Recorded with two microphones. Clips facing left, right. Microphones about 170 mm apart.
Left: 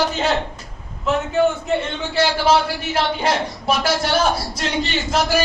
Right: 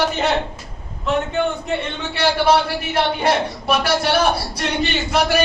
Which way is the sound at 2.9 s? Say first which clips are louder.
Right 2 dB; 60° right (ahead or behind).